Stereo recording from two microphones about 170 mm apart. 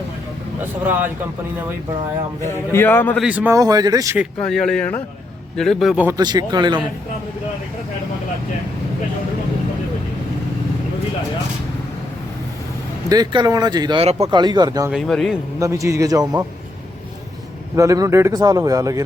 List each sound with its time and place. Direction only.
0.9 s a man's voice: 10° right (ahead or behind)
2.4 s a man's voice: 15° left (ahead or behind)
3.2 s a man's voice: 10° right (ahead or behind)
3.6 s speech: 20° right (ahead or behind)
4.4 s speech: 5° left (ahead or behind)
6.1 s speech: 25° right (ahead or behind)
13.1 s speech: 25° right (ahead or behind)
14.8 s speech: centre (ahead or behind)
15.5 s speech: 20° right (ahead or behind)
17.7 s speech: 20° right (ahead or behind)